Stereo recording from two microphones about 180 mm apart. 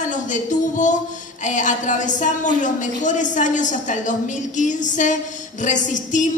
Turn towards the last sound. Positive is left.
turn(degrees=45)  # may be behind; listen again after turning